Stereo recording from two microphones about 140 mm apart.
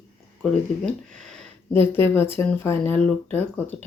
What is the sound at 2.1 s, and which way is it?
Speech, 15° left (ahead or behind).